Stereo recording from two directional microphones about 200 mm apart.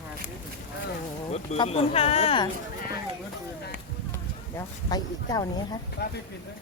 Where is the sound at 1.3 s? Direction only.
30° left (ahead or behind).